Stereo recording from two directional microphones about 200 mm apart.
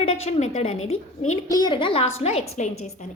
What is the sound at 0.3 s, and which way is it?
Speech, 30° left (ahead or behind).